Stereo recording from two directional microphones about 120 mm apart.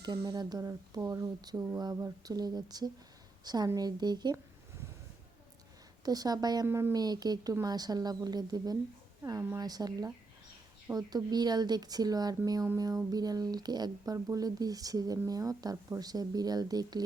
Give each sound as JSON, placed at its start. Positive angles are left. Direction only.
{"t": 0.3, "sound": "a woman's voice", "side_deg": -30}
{"t": 6.1, "sound": "speech", "side_deg": -35}
{"t": 6.7, "sound": "speech", "side_deg": -20}
{"t": 6.9, "sound": "speech", "side_deg": -35}